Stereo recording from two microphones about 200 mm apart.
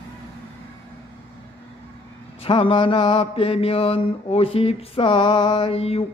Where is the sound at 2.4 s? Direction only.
25° left (ahead or behind).